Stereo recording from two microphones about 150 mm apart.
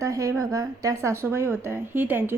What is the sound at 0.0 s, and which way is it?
A woman's voice, 20° right (ahead or behind).